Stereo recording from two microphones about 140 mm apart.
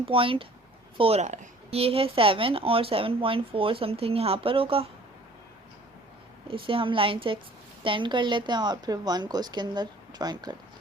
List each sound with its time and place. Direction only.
0.0 s speech: 40° right (ahead or behind)
6.5 s speech: 40° right (ahead or behind)